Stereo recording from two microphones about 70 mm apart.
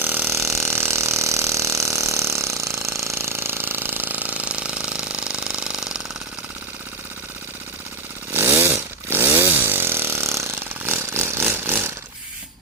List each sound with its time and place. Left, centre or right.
0.0 s a sound: right
3.0 s mechanisms: right; by 6.0 s centre
8.3 s chainsaw: right